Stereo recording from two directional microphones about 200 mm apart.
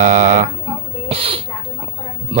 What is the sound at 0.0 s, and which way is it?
Speech, 35° right (ahead or behind).